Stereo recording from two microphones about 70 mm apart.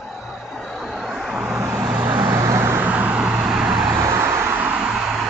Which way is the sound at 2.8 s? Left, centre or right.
Right.